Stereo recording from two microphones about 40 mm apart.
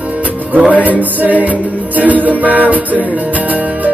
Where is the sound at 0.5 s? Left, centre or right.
Right.